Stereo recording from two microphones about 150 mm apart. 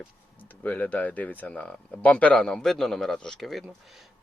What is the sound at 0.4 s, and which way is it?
Speech, 10° left (ahead or behind).